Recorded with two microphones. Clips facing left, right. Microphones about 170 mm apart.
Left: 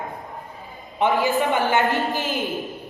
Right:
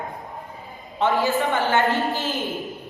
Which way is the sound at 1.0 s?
15° left (ahead or behind).